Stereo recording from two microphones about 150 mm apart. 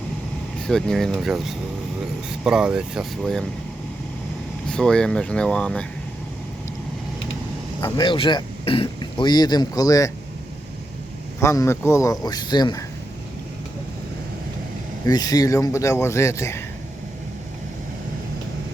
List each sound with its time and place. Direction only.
0.7 s speech: 5° left (ahead or behind)
4.7 s speech: 5° left (ahead or behind)
7.8 s speech: 25° left (ahead or behind)
11.3 s speech: 20° left (ahead or behind)
15.0 s speech: 25° left (ahead or behind)